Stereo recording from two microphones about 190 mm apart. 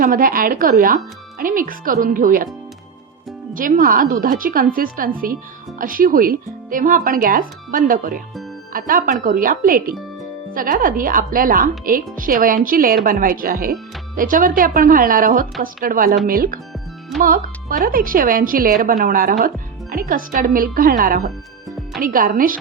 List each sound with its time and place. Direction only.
0.0 s speech: 45° right (ahead or behind)
3.5 s speech: 45° right (ahead or behind)